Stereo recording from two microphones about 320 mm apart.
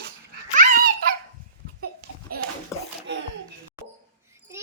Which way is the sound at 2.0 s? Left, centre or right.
Right.